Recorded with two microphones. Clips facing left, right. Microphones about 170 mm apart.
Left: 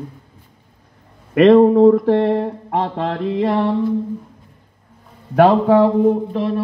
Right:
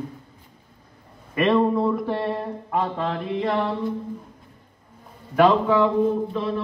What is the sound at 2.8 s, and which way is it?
Music, 65° left (ahead or behind).